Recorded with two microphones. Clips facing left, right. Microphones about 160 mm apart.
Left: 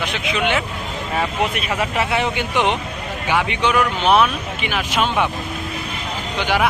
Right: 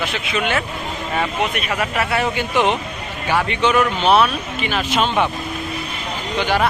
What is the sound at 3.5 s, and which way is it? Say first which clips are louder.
Speech: right 2 dB; 15° left (ahead or behind).